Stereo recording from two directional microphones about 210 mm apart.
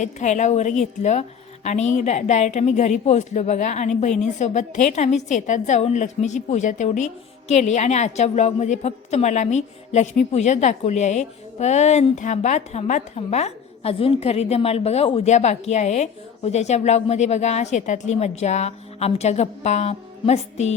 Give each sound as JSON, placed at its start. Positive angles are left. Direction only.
{"t": 0.0, "sound": "a woman's voice", "side_deg": 35}